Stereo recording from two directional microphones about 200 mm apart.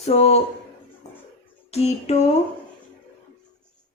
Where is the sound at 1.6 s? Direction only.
30° left (ahead or behind).